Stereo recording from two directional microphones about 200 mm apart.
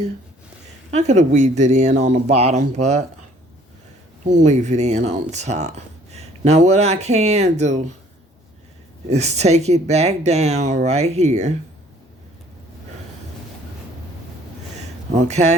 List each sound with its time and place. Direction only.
0.9 s speech: 35° right (ahead or behind)
4.3 s speech: 35° right (ahead or behind)
9.0 s speech: 35° right (ahead or behind)
15.1 s speech: 35° right (ahead or behind)